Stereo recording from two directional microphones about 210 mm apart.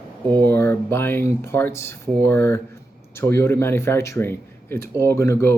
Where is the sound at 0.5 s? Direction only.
10° left (ahead or behind).